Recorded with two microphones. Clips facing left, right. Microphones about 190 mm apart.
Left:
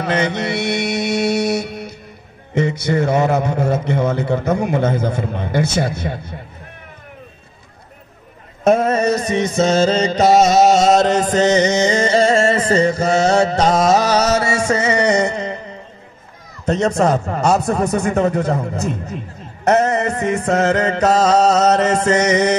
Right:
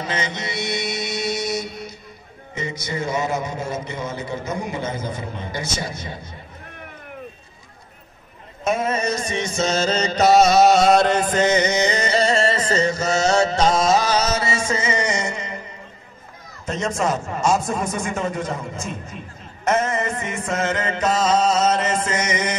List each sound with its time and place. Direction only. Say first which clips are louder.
0.0 s mantra: left 8 dB; 60° left (ahead or behind)
2.5 s a man's voice: left 11 dB; 60° left (ahead or behind)
8.8 s music: left 7 dB; 40° left (ahead or behind)
10.3 s music: left 1 dB; 45° left (ahead or behind)
12.5 s mantra: left 5 dB; 35° left (ahead or behind)
14.6 s music: left 6 dB; 40° left (ahead or behind)
15.0 s a sound: left 8 dB; 65° left (ahead or behind)
16.6 s a man's voice: left 7 dB; 65° left (ahead or behind)
18.5 s music: left 8 dB; 40° left (ahead or behind)
21.0 s music: left 5 dB; 70° left (ahead or behind)
21.6 s music: left 6 dB; 40° left (ahead or behind)
22.1 s music: left 9 dB; 70° left (ahead or behind)